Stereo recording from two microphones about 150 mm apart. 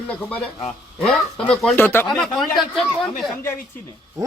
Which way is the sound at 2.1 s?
Centre (ahead or behind).